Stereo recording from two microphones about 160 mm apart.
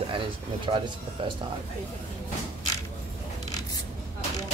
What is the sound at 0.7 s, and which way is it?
Speech, 30° right (ahead or behind).